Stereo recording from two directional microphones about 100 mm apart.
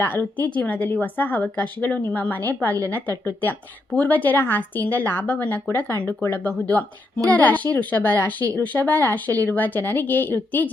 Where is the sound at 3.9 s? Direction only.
15° left (ahead or behind).